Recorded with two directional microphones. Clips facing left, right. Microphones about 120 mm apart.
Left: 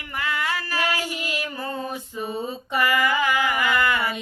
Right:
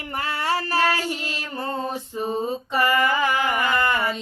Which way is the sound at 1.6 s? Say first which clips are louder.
Right 2 dB; 30° right (ahead or behind).